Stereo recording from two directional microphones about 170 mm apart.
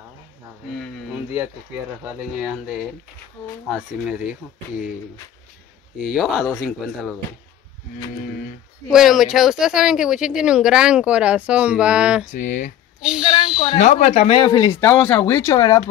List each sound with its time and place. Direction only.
1.1 s speech: 10° right (ahead or behind)
6.0 s speech: 5° right (ahead or behind)
8.9 s speech: centre (ahead or behind)
12.3 s speech: 45° left (ahead or behind)
13.0 s a sound: 5° right (ahead or behind)
13.7 s speech: 45° left (ahead or behind); by 15.8 s 20° left (ahead or behind)